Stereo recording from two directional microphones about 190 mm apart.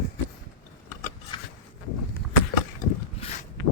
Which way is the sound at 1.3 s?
25° left (ahead or behind).